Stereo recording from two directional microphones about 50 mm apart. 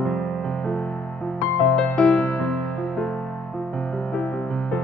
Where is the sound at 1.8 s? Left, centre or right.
Centre.